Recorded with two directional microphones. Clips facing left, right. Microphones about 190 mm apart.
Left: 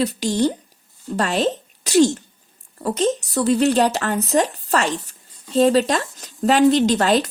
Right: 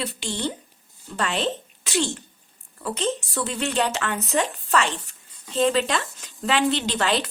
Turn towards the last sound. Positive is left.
turn(degrees=40)  # may be behind; listen again after turning